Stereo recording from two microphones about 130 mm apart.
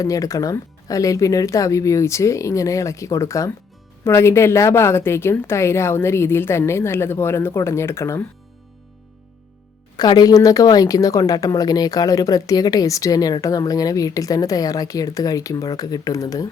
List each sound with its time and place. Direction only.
0.0 s a woman's voice: 25° left (ahead or behind)
10.0 s a woman's voice: 30° left (ahead or behind)